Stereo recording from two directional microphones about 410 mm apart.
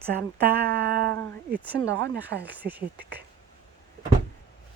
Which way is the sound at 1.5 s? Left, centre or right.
Centre.